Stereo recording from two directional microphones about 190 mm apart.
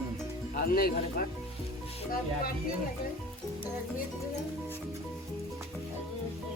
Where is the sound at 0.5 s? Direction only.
50° left (ahead or behind).